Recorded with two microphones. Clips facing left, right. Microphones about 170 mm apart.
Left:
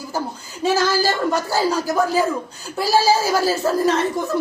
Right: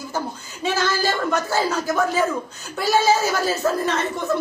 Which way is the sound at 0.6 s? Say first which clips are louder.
Left 4 dB; 35° left (ahead or behind).